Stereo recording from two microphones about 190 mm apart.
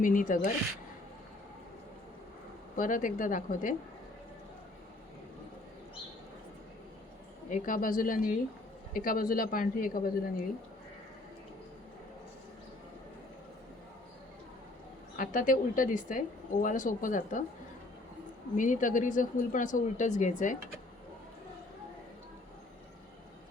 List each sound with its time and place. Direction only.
0.0 s speech: 45° left (ahead or behind)
2.7 s speech: 45° left (ahead or behind)
7.5 s speech: 45° left (ahead or behind)
15.1 s speech: 45° left (ahead or behind)
18.5 s a woman's voice: 45° left (ahead or behind)